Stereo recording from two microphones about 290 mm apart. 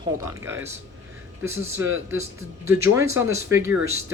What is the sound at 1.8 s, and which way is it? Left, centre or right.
Speech, right.